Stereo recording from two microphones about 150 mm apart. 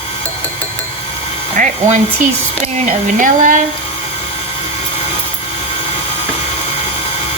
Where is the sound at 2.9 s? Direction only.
60° right (ahead or behind).